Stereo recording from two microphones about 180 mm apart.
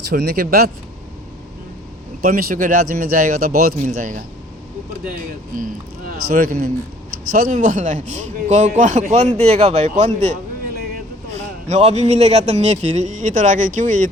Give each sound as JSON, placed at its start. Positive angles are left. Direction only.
{"t": 0.1, "sound": "speech", "side_deg": -55}
{"t": 2.2, "sound": "speech", "side_deg": -55}
{"t": 5.5, "sound": "a man's voice", "side_deg": -50}
{"t": 11.3, "sound": "a man's voice", "side_deg": -40}